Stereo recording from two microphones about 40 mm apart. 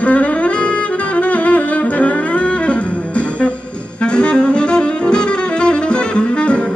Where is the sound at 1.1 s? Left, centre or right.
Left.